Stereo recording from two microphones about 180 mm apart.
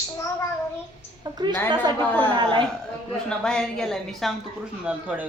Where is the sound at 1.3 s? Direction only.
25° right (ahead or behind).